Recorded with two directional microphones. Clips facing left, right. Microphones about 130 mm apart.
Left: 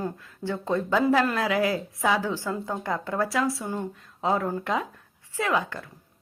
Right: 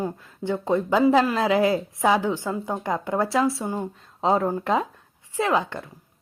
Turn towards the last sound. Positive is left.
turn(degrees=-25)  # may be behind; listen again after turning